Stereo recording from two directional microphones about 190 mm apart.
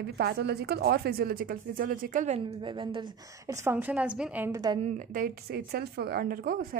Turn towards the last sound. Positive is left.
turn(degrees=-50)  # may be behind; listen again after turning